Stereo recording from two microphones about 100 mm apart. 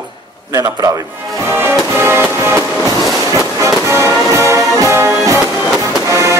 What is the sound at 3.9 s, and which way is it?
Music, 30° right (ahead or behind).